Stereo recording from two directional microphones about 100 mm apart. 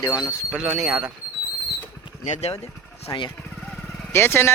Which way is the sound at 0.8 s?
5° right (ahead or behind).